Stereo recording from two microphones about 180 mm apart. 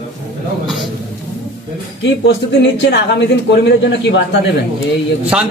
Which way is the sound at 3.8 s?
75° left (ahead or behind).